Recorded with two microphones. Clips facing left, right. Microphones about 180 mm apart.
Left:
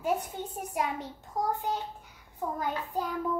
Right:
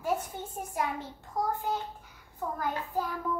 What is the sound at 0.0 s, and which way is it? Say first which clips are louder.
A child's voice: left 1 dB; 20° left (ahead or behind).